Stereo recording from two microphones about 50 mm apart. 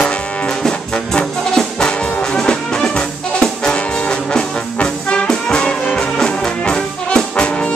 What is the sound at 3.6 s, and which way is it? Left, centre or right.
Music, centre.